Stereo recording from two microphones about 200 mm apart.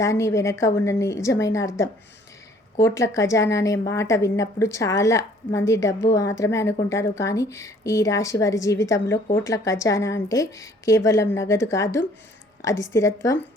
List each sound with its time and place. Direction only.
0.0 s a woman's voice: 15° left (ahead or behind)